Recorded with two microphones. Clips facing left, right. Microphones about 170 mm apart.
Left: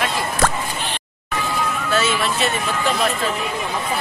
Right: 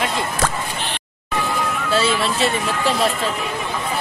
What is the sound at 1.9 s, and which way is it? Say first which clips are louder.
Music: right 2 dB; 30° right (ahead or behind).